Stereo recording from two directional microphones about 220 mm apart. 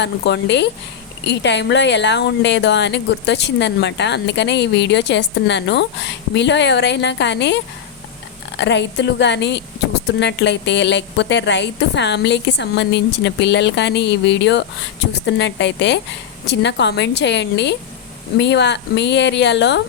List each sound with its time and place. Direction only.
0.0 s speech: 50° left (ahead or behind)